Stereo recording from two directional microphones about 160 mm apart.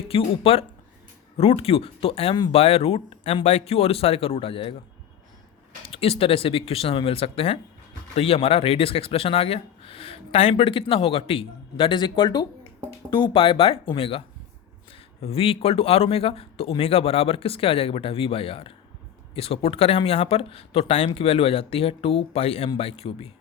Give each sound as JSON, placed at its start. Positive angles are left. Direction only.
{"t": 0.1, "sound": "speech", "side_deg": 35}
{"t": 5.9, "sound": "speech", "side_deg": 35}